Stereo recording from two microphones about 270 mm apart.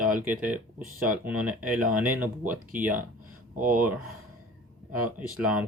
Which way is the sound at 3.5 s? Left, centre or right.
Right.